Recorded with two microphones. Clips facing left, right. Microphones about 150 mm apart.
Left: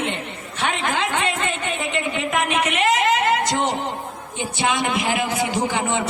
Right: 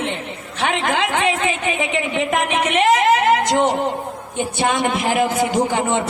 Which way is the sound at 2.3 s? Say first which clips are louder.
Right 2 dB; 45° right (ahead or behind).